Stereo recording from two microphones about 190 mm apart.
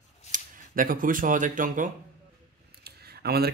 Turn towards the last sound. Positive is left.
turn(degrees=-55)  # may be behind; listen again after turning